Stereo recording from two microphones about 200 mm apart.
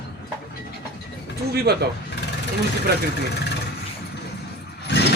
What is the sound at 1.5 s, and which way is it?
Speech, 55° right (ahead or behind).